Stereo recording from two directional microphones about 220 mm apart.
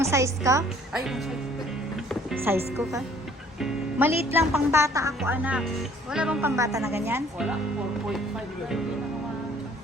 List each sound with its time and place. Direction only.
0.0 s speech: 15° right (ahead or behind)
0.9 s speech: centre (ahead or behind)